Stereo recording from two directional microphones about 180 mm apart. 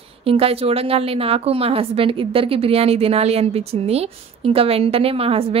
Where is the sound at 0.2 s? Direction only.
30° right (ahead or behind).